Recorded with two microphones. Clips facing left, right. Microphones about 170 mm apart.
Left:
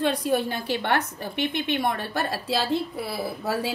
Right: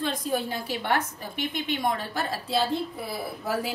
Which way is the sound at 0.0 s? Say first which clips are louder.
Left 5 dB; 65° left (ahead or behind).